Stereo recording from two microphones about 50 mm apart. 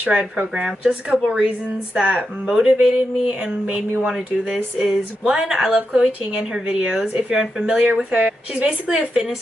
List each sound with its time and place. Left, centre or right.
0.0 s speech: right
4.0 s speech: centre